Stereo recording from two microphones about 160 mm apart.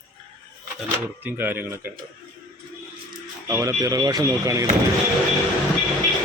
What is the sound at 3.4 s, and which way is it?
Speech, 20° right (ahead or behind).